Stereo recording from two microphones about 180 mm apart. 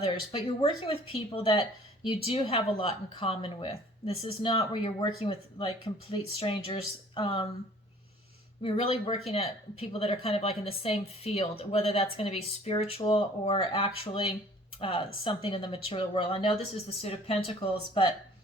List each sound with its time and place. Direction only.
0.3 s speech: 30° left (ahead or behind)
8.6 s speech: 30° left (ahead or behind)